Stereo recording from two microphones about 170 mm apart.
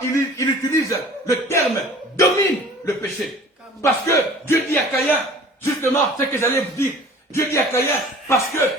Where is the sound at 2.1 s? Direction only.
15° left (ahead or behind).